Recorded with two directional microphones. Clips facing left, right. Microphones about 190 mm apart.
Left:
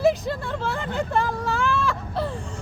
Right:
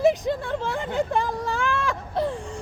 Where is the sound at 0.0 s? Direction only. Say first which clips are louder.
Right 1 dB; 15° right (ahead or behind).